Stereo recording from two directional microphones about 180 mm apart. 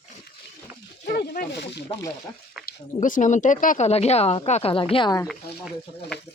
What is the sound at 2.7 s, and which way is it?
Speech, 45° left (ahead or behind).